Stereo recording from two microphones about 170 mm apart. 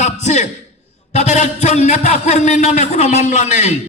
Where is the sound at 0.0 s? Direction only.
45° left (ahead or behind).